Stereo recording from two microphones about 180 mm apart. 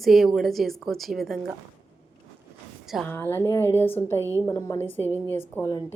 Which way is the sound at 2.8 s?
Centre (ahead or behind).